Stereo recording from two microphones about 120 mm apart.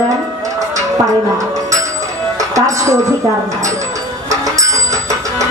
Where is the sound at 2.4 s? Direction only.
25° right (ahead or behind).